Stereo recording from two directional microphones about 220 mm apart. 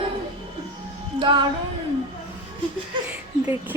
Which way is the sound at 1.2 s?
20° right (ahead or behind).